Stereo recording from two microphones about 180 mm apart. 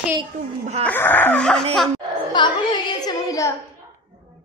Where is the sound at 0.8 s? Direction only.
10° left (ahead or behind).